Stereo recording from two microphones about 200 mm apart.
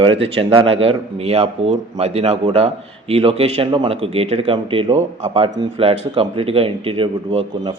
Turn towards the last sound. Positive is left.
turn(degrees=-25)  # may be behind; listen again after turning